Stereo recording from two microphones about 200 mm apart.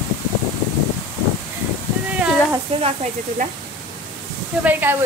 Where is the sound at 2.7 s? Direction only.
30° right (ahead or behind).